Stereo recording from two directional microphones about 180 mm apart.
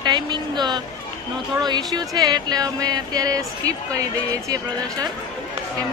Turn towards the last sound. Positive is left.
turn(degrees=-20)  # may be behind; listen again after turning